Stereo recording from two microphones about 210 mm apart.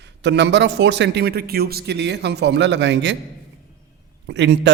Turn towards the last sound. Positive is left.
turn(degrees=-55)  # may be behind; listen again after turning